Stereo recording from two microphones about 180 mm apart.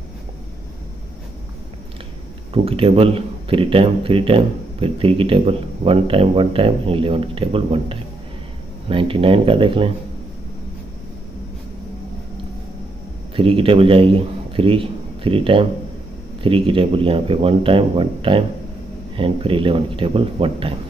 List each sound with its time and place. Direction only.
2.5 s a man's voice: 30° right (ahead or behind)
13.4 s a man's voice: 30° right (ahead or behind)